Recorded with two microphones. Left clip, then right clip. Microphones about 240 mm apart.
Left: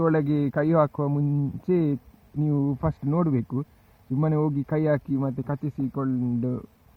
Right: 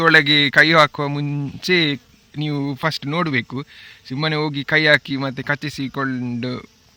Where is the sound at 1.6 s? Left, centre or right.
Right.